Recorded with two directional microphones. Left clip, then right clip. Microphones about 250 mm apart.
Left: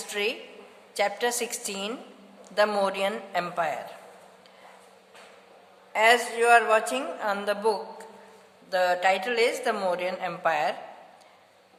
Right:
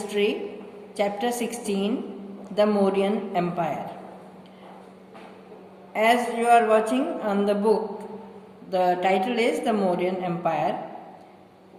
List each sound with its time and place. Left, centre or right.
0.1 s a woman's voice: left
5.9 s a woman's voice: left